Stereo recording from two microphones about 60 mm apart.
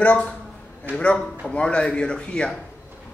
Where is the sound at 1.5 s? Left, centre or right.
Centre.